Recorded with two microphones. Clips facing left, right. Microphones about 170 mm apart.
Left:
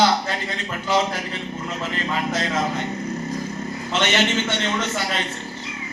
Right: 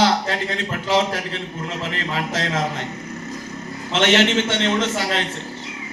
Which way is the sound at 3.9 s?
90° right.